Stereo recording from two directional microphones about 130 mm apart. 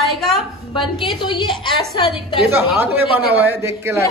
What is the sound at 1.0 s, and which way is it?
A woman's voice, 40° left (ahead or behind).